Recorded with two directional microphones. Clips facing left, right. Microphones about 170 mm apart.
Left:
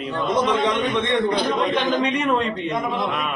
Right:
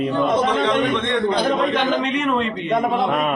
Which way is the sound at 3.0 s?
45° right (ahead or behind).